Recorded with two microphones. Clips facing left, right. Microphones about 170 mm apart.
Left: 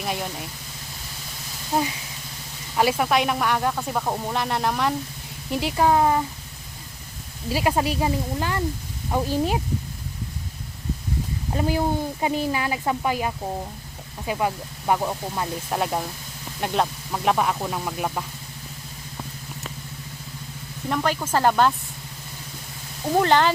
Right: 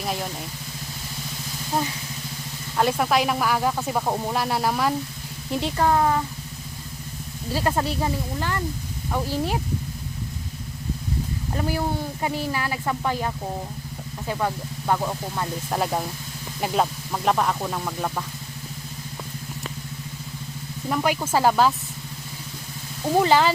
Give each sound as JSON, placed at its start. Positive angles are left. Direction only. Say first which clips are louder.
{"t": 0.0, "sound": "speech", "louder": "even", "side_deg": 0}
{"t": 2.7, "sound": "speech", "louder": "even", "side_deg": 5}
{"t": 5.8, "sound": "speech", "louder": "left 2 dB", "side_deg": 15}
{"t": 7.5, "sound": "speech", "louder": "left 2 dB", "side_deg": 15}
{"t": 11.5, "sound": "speech", "louder": "left 3 dB", "side_deg": 20}
{"t": 15.7, "sound": "speech", "louder": "right 1 dB", "side_deg": 0}
{"t": 20.9, "sound": "speech", "louder": "right 1 dB", "side_deg": -10}
{"t": 23.0, "sound": "speech", "louder": "even", "side_deg": -5}